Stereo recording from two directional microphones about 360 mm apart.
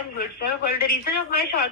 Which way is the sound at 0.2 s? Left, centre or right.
Left.